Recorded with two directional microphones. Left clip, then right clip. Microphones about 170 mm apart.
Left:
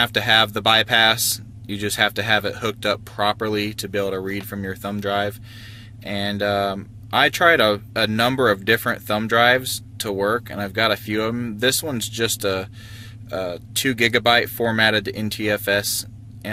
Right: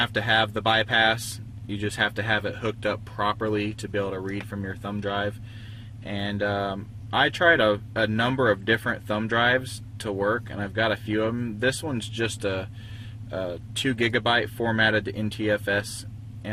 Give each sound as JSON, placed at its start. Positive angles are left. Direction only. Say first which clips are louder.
{"t": 0.0, "sound": "speech", "louder": "left 6 dB", "side_deg": 20}